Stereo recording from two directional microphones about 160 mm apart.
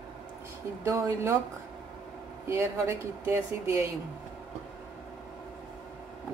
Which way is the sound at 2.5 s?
15° right (ahead or behind).